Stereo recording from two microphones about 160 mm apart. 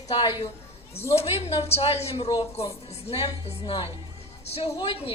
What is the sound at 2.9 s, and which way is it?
Speech, 40° left (ahead or behind).